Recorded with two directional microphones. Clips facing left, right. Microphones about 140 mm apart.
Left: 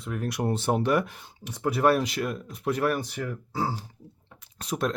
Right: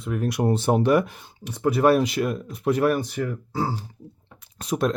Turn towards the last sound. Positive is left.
turn(degrees=-15)  # may be behind; listen again after turning